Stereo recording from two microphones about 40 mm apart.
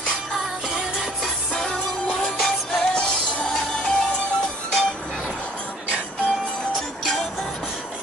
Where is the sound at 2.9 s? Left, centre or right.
Left.